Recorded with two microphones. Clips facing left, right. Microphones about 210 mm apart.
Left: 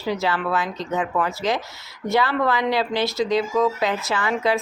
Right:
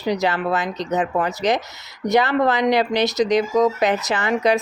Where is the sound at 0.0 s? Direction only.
15° right (ahead or behind).